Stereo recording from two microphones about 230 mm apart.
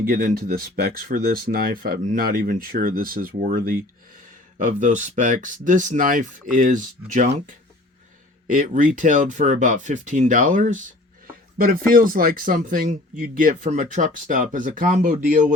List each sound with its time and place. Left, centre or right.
0.0 s speech: right